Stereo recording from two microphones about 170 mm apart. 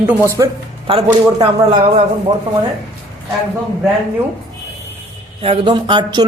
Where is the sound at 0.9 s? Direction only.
35° right (ahead or behind).